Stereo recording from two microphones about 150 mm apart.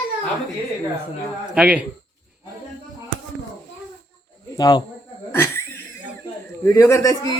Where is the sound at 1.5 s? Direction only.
10° right (ahead or behind).